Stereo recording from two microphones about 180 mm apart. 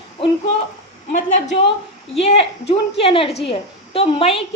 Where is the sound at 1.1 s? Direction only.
45° left (ahead or behind).